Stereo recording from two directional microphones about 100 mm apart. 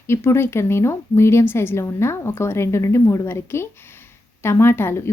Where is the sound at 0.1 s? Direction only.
25° left (ahead or behind).